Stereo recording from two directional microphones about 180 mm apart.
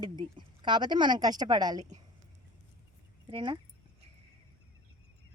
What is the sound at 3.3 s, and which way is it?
Speech, 25° right (ahead or behind).